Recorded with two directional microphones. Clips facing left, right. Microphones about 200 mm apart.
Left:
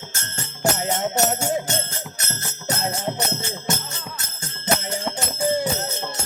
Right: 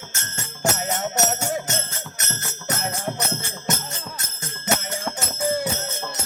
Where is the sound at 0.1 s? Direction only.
35° left (ahead or behind).